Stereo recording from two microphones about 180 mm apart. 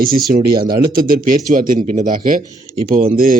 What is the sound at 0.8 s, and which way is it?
Speech, 55° right (ahead or behind).